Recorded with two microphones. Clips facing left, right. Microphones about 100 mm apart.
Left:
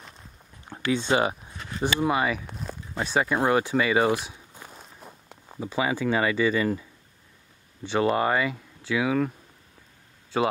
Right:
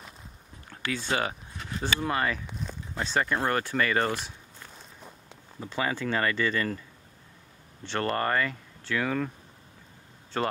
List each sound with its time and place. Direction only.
0.7 s speech: 20° left (ahead or behind)
7.8 s speech: 10° left (ahead or behind)
10.3 s speech: 10° left (ahead or behind)